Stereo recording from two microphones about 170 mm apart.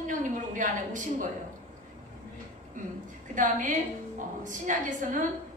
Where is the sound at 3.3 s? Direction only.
50° right (ahead or behind).